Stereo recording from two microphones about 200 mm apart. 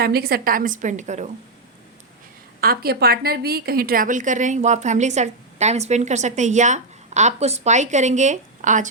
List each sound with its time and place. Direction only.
0.0 s a woman's voice: 50° right (ahead or behind)
2.6 s a woman's voice: 50° right (ahead or behind)